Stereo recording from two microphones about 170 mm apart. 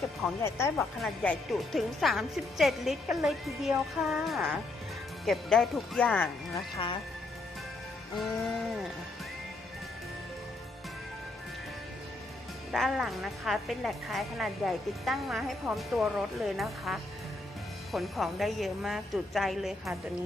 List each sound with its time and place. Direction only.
0.8 s a woman's voice: 5° left (ahead or behind)
6.7 s speech: 30° left (ahead or behind)
8.2 s a woman's voice: centre (ahead or behind)
12.7 s a woman's voice: centre (ahead or behind)